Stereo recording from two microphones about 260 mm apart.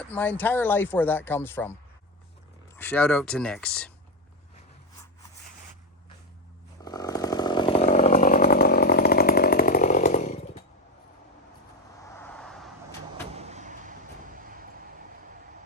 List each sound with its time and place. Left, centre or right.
0.1 s speech: centre
2.7 s speech: centre
6.8 s chainsaw: centre
12.2 s vehicle: centre
13.3 s vehicle: right